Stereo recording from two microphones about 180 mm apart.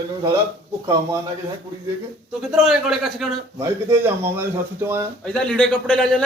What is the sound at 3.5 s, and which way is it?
Speech, 15° right (ahead or behind).